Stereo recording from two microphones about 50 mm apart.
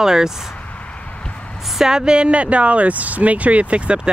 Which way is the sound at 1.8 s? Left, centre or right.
Centre.